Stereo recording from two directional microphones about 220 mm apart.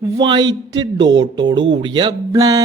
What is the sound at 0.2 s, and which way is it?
A man's voice, 20° right (ahead or behind).